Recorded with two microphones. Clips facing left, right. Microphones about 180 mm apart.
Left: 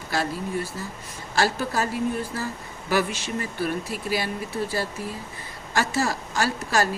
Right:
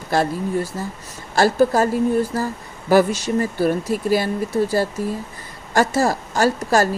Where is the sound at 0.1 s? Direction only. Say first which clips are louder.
Right 7 dB; 45° right (ahead or behind).